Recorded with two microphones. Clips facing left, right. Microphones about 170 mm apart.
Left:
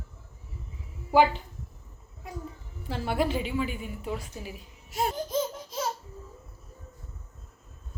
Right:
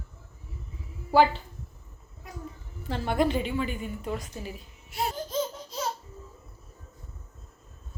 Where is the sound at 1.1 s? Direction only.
10° left (ahead or behind).